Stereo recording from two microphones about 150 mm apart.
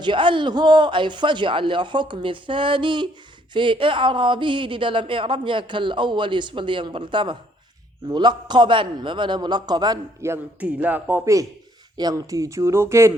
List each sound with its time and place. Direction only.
0.0 s a man's voice: 35° right (ahead or behind)